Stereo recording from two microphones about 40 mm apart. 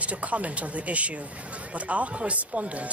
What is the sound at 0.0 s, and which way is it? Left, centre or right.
Speech, right.